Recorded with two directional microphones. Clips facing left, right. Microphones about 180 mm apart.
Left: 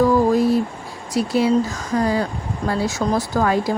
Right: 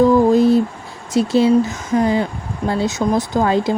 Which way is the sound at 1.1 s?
25° right (ahead or behind).